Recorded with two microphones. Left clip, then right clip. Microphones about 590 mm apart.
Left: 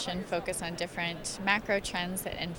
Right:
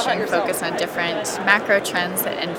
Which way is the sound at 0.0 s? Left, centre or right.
Left.